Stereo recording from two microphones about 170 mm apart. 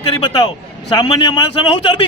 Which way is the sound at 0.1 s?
25° left (ahead or behind).